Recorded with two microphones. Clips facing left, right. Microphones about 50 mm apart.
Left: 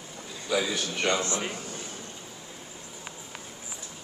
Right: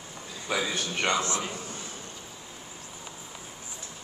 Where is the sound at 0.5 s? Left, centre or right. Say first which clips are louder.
Left 2 dB; right.